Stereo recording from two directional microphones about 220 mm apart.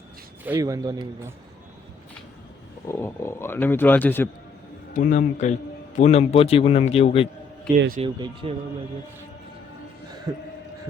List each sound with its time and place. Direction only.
0.4 s a man's voice: 15° right (ahead or behind)
2.8 s speech: 10° left (ahead or behind)
4.9 s a man's voice: 35° left (ahead or behind)
7.8 s speech: 40° right (ahead or behind)
8.0 s speech: 25° right (ahead or behind)
10.3 s a man's voice: 15° right (ahead or behind)